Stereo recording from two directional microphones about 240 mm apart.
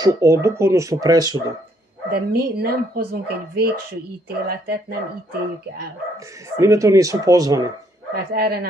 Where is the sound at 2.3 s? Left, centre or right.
Right.